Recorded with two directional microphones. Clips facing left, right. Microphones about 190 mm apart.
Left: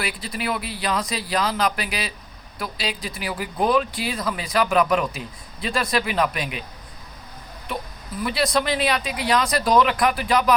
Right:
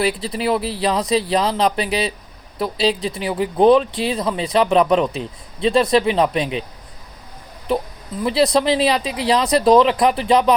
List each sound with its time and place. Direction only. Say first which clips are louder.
0.0 s speech: right 8 dB; 30° right (ahead or behind)
8.2 s speech: right 6 dB; 25° right (ahead or behind)